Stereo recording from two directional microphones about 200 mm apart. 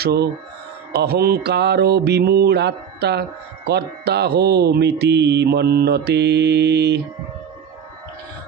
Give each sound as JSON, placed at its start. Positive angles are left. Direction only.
{"t": 0.0, "sound": "mantra", "side_deg": -55}